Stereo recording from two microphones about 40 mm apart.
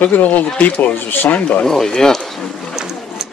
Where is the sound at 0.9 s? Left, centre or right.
Left.